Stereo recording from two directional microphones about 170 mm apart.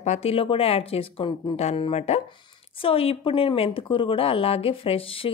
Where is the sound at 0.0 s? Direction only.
40° left (ahead or behind).